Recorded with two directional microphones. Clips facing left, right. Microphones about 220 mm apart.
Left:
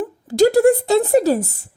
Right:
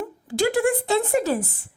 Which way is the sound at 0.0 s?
40° left (ahead or behind).